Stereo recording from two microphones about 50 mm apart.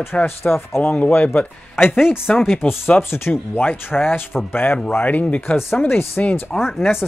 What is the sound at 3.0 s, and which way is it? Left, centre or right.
Speech, left.